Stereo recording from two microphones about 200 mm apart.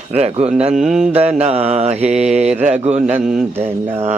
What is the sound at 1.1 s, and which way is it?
Mantra, 30° right (ahead or behind).